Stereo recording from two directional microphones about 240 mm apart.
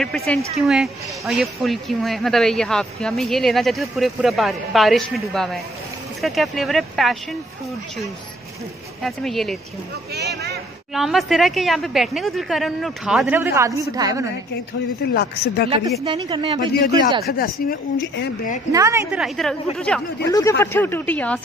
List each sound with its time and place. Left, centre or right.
0.0 s speech: centre
9.0 s speech: centre
10.1 s a sound: right
10.9 s a woman's voice: centre
15.1 s speech: left
16.0 s speech: right
17.3 s speech: left
18.7 s a woman's voice: centre
19.1 s speech: centre
20.2 s speech: centre